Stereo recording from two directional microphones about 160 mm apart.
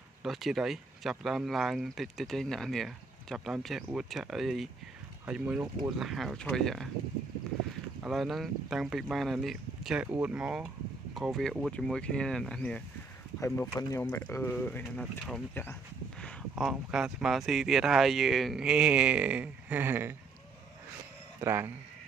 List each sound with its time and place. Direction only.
0.2 s speech: centre (ahead or behind)
8.0 s speech: centre (ahead or behind)
13.4 s speech: 20° left (ahead or behind)
16.5 s speech: 5° right (ahead or behind)
21.4 s speech: 15° right (ahead or behind)